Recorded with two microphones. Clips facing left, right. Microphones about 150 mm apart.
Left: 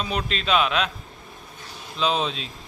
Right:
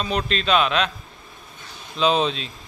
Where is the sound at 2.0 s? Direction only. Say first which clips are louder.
Right 4 dB; centre (ahead or behind).